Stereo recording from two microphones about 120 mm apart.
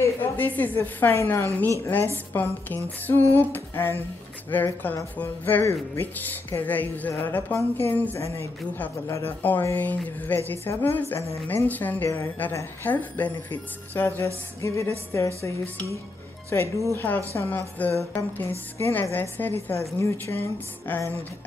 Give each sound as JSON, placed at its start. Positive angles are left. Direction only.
{"t": 0.0, "sound": "a woman's voice", "side_deg": 15}
{"t": 16.4, "sound": "a woman's voice", "side_deg": 20}